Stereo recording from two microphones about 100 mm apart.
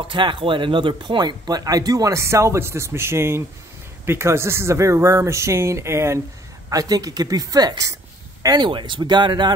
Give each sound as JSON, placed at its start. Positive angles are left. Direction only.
{"t": 0.0, "sound": "speech", "side_deg": -55}
{"t": 6.7, "sound": "speech", "side_deg": -35}
{"t": 8.6, "sound": "speech", "side_deg": -50}